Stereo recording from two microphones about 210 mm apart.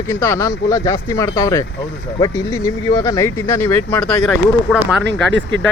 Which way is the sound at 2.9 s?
15° left (ahead or behind).